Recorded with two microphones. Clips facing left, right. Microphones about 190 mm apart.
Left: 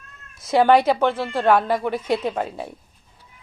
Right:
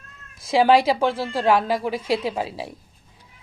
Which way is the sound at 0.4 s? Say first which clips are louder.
Left 1 dB; 5° right (ahead or behind).